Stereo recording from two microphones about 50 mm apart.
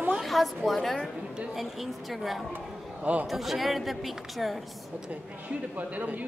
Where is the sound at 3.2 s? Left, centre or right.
Centre.